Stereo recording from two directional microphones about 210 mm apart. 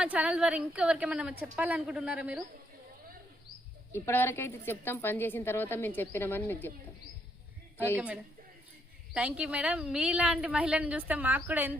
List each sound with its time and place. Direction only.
0.0 s a woman's voice: 5° right (ahead or behind)
3.9 s speech: 10° left (ahead or behind)
7.9 s a woman's voice: 5° right (ahead or behind)